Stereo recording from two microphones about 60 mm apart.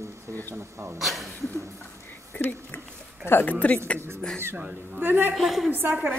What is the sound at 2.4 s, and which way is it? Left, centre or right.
A woman's voice, left.